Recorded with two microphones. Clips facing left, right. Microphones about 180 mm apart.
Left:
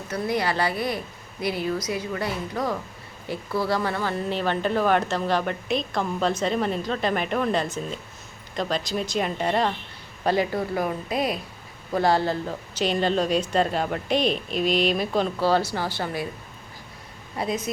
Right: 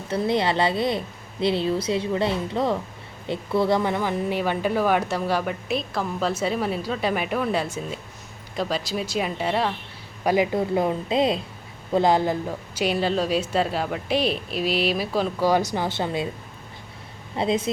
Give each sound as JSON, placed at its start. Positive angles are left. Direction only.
{"t": 0.1, "sound": "speech", "side_deg": -25}
{"t": 10.2, "sound": "speech", "side_deg": -15}
{"t": 17.3, "sound": "speech", "side_deg": -25}